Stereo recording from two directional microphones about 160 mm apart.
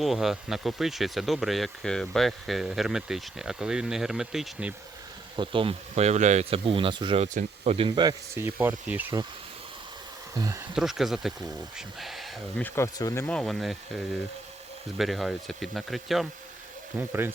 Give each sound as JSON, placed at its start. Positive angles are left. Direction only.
{"t": 0.0, "sound": "speech", "side_deg": 0}
{"t": 5.4, "sound": "speech", "side_deg": -35}
{"t": 7.3, "sound": "speech", "side_deg": -40}
{"t": 7.9, "sound": "speech", "side_deg": -25}
{"t": 8.4, "sound": "speech", "side_deg": -15}
{"t": 10.3, "sound": "speech", "side_deg": -20}
{"t": 10.8, "sound": "speech", "side_deg": 0}
{"t": 12.6, "sound": "speech", "side_deg": 15}
{"t": 13.2, "sound": "speech", "side_deg": 5}
{"t": 17.0, "sound": "speech", "side_deg": -15}